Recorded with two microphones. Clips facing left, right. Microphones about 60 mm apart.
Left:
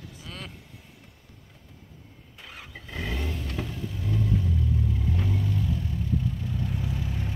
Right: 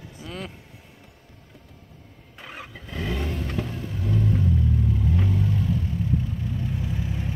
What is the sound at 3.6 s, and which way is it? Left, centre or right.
Vehicle, centre.